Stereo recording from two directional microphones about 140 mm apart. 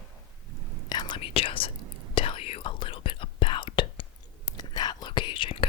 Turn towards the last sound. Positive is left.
turn(degrees=35)  # may be behind; listen again after turning